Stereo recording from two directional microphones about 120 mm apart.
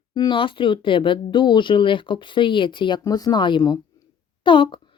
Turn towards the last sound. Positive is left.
turn(degrees=45)  # may be behind; listen again after turning